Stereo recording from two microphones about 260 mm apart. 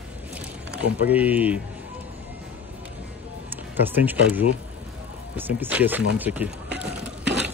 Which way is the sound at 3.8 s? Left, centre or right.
Centre.